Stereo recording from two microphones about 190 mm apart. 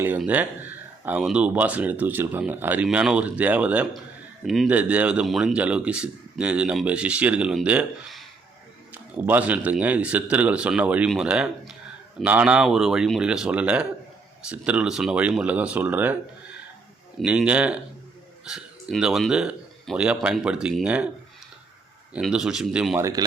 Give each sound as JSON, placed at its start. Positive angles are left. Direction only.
{"t": 0.2, "sound": "speech", "side_deg": -10}
{"t": 9.2, "sound": "speech", "side_deg": -10}
{"t": 17.2, "sound": "speech", "side_deg": -5}
{"t": 22.1, "sound": "speech", "side_deg": -5}